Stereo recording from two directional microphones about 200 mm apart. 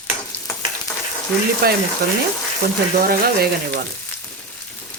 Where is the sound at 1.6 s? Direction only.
50° right (ahead or behind).